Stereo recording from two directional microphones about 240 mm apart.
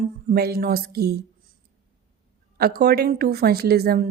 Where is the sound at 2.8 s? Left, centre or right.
Right.